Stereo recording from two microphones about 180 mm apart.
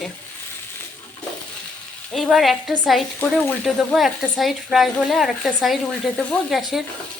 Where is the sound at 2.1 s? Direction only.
Centre (ahead or behind).